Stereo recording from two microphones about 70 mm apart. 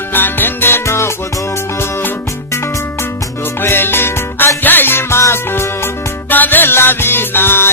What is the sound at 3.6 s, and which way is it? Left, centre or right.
Music, left.